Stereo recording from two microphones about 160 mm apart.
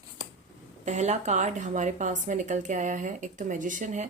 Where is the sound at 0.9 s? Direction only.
45° right (ahead or behind).